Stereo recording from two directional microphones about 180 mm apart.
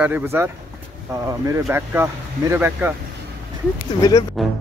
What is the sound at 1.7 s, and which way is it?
Speech, 15° right (ahead or behind).